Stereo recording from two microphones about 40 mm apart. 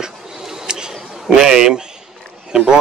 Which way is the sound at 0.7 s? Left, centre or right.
Centre.